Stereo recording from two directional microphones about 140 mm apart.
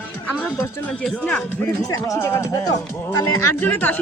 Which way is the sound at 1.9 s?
20° left (ahead or behind).